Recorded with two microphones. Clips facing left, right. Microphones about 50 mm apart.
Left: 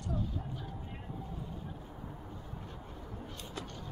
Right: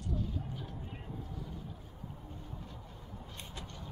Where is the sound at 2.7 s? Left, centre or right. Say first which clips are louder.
Left 3 dB; left.